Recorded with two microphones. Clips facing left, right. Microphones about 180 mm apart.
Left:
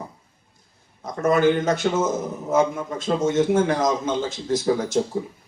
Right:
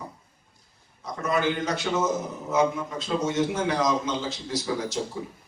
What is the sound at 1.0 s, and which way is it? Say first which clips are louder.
A man's voice: left 7 dB; 50° left (ahead or behind).